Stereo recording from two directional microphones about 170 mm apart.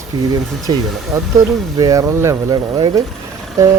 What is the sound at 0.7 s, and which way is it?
Speech, 25° right (ahead or behind).